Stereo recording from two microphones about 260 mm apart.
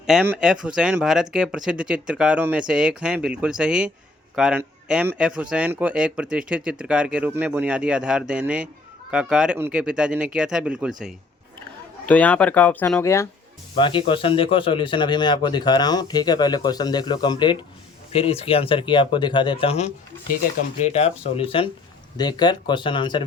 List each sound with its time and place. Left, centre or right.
0.0 s speech: centre